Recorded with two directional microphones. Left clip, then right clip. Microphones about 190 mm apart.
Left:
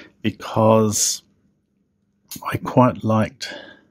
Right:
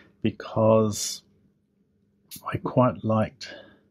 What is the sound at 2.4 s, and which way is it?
Speech, 30° left (ahead or behind).